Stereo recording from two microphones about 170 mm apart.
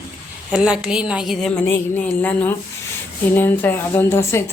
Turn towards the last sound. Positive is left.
turn(degrees=15)  # may be behind; listen again after turning